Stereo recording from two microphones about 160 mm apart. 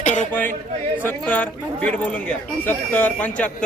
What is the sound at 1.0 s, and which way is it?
Speech, 10° left (ahead or behind).